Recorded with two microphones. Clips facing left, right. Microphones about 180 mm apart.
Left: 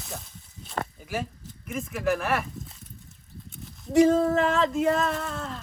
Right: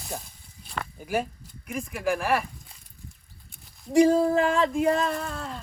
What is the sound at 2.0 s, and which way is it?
Speech, centre (ahead or behind).